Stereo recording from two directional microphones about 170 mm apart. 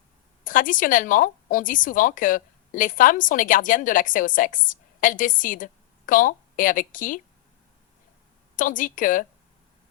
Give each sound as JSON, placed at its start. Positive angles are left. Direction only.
{"t": 0.4, "sound": "speech", "side_deg": 50}
{"t": 8.5, "sound": "speech", "side_deg": 50}